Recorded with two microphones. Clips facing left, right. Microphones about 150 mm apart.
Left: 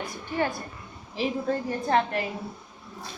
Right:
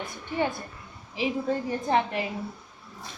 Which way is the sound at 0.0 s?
20° right (ahead or behind).